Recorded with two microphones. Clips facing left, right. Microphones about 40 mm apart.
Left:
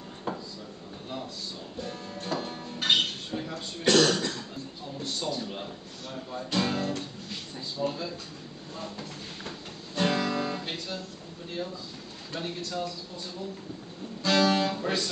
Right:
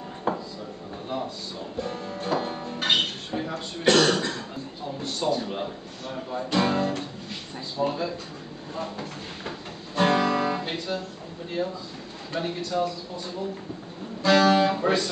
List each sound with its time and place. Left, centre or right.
0.3 s chopping: centre
1.0 s a sound: centre
1.8 s music: centre
3.9 s cough: centre
4.9 s speech: centre
9.9 s music: centre
11.6 s speech: centre
14.2 s music: centre